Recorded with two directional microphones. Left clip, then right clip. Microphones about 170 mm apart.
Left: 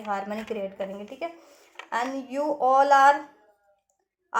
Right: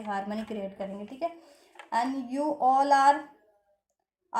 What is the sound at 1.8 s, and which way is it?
A woman's voice, 25° left (ahead or behind).